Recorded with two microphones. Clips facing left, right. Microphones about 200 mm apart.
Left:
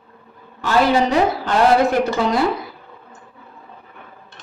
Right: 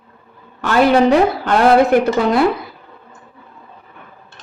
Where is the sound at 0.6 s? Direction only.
60° right (ahead or behind).